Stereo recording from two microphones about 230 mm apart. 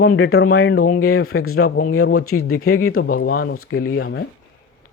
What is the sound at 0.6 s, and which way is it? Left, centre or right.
Speech, left.